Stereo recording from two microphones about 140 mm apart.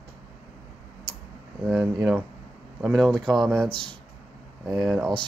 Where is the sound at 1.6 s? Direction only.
Centre (ahead or behind).